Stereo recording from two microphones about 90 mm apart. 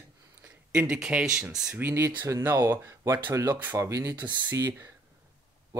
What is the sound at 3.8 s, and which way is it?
Speech, 35° right (ahead or behind).